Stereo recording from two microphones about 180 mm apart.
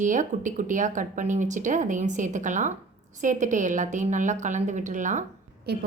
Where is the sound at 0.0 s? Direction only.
45° right (ahead or behind).